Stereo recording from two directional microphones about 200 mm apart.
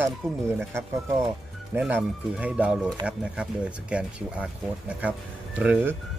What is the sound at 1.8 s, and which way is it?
A man's voice, 5° right (ahead or behind).